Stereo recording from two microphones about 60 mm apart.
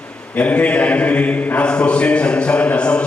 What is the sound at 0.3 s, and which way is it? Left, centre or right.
Speech, left.